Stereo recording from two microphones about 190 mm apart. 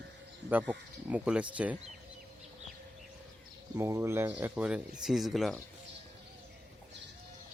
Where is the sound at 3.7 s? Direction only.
15° right (ahead or behind).